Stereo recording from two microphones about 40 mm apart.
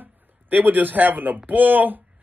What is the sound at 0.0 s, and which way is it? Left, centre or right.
A man's voice, right.